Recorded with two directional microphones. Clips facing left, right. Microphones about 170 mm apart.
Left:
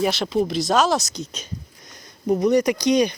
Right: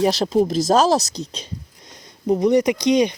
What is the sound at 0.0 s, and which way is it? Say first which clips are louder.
Speech: right 4 dB; 35° right (ahead or behind).